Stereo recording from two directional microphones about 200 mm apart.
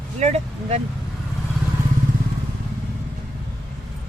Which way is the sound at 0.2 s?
35° right (ahead or behind).